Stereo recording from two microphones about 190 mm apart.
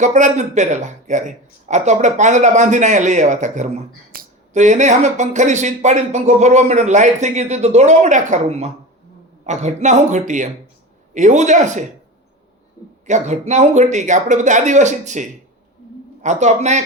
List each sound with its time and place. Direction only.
0.0 s speech: 40° right (ahead or behind)
13.1 s speech: 40° right (ahead or behind)